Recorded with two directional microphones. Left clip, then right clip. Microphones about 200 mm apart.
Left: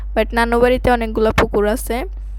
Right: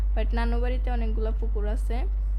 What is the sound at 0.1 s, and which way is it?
Speech, 55° left (ahead or behind).